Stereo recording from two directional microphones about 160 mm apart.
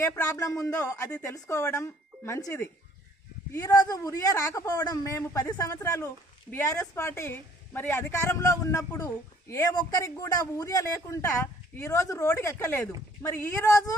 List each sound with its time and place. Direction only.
0.0 s a man's voice: 20° left (ahead or behind)